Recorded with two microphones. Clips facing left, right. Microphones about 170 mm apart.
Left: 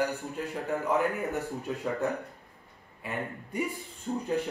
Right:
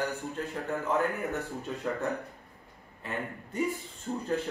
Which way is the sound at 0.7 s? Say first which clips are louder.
Left 2 dB; centre (ahead or behind).